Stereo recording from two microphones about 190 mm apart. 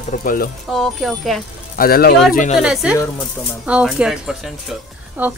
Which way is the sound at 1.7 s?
50° left (ahead or behind).